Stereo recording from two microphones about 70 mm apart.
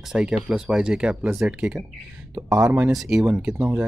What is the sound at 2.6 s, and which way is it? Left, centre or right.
Speech, right.